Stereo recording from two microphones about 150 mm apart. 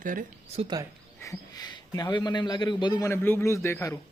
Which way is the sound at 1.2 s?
25° left (ahead or behind).